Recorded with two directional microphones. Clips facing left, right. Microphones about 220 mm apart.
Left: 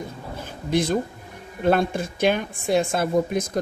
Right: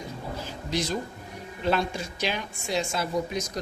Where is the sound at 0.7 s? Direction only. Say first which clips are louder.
Left 8 dB; 55° left (ahead or behind).